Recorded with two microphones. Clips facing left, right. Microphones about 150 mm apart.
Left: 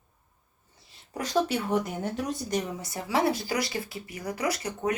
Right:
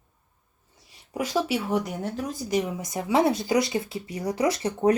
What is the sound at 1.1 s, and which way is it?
Speech, 10° right (ahead or behind).